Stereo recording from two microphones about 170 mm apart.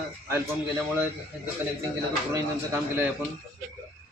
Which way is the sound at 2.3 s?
15° right (ahead or behind).